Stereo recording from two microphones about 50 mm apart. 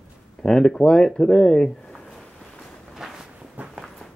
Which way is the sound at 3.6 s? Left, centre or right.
Right.